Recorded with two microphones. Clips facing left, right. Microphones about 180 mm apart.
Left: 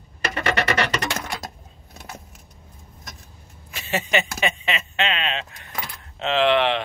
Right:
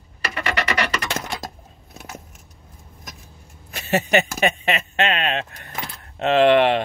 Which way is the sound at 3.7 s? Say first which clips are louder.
Right 5 dB; 40° right (ahead or behind).